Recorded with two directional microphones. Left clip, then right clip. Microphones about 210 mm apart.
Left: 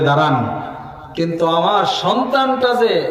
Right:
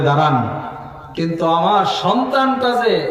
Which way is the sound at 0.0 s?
50° left (ahead or behind).